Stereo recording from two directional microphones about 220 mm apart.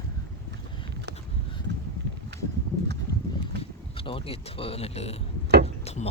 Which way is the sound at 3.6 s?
25° left (ahead or behind).